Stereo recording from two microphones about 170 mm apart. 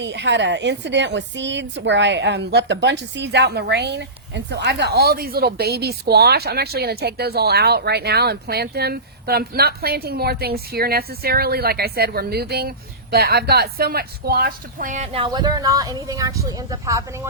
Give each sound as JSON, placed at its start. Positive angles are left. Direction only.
{"t": 0.0, "sound": "a woman's voice", "side_deg": -90}